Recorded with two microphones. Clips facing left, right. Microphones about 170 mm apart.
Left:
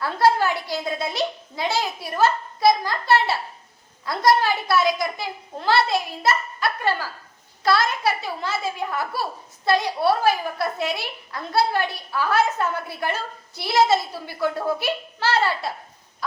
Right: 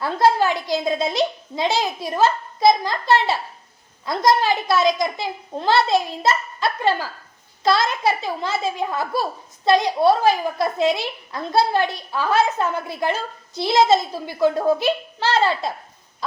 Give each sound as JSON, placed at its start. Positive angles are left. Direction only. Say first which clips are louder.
{"t": 0.0, "sound": "a child's voice", "louder": "right 2 dB", "side_deg": -20}